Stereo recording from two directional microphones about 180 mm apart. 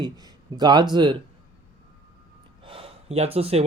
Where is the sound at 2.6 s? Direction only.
30° right (ahead or behind).